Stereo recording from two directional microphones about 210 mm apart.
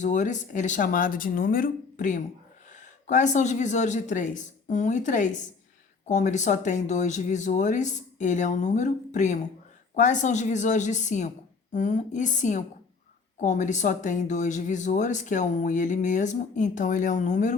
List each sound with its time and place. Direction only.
0.0 s speech: 35° left (ahead or behind)